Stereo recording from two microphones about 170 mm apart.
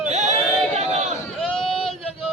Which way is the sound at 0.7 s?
40° right (ahead or behind).